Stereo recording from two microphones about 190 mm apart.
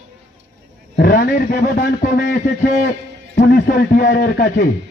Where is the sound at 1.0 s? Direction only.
50° left (ahead or behind).